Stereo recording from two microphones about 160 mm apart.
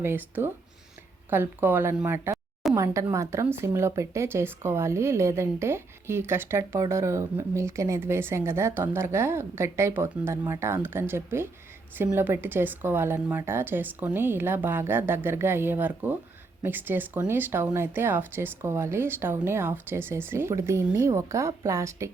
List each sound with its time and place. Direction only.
0.0 s speech: 15° right (ahead or behind)